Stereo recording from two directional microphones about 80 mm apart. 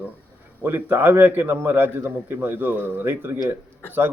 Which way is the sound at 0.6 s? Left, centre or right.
Right.